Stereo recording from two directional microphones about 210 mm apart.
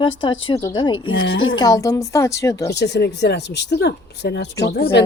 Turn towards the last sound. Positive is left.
turn(degrees=55)  # may be behind; listen again after turning